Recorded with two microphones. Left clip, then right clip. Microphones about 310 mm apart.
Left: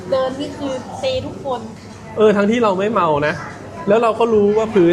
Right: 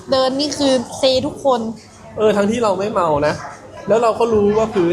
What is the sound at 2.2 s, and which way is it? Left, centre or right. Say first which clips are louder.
A man's voice: left 2 dB; left.